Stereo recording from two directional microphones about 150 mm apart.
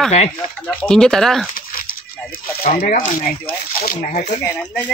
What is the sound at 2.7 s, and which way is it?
Speech, 75° left (ahead or behind).